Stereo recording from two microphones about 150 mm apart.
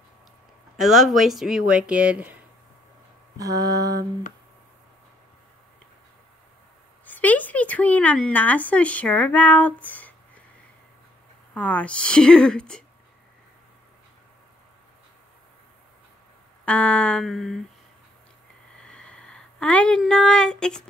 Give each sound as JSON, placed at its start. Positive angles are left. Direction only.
{"t": 0.7, "sound": "speech", "side_deg": 0}
{"t": 3.3, "sound": "mantra", "side_deg": -25}
{"t": 7.1, "sound": "speech", "side_deg": 10}
{"t": 11.5, "sound": "speech", "side_deg": 10}
{"t": 16.6, "sound": "speech", "side_deg": 10}
{"t": 18.8, "sound": "a sound", "side_deg": 5}
{"t": 20.0, "sound": "speech", "side_deg": 5}